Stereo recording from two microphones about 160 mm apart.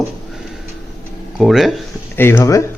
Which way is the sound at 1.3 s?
5° right (ahead or behind).